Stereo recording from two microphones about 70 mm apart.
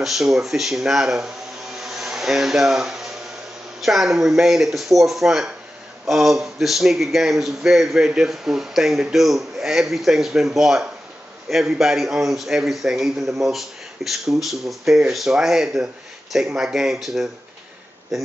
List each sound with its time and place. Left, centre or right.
0.0 s a man's voice: centre
1.8 s vacuum cleaner: centre
3.8 s a man's voice: centre